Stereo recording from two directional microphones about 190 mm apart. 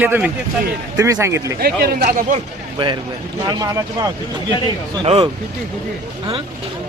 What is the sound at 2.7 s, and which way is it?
Speech, 25° right (ahead or behind).